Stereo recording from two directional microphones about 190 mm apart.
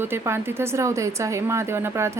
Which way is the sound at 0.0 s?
10° right (ahead or behind).